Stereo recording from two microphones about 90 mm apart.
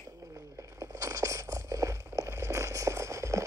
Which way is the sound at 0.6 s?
35° right (ahead or behind).